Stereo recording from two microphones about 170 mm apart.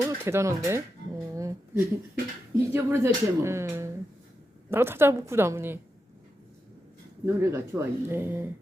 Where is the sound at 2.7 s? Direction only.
15° right (ahead or behind).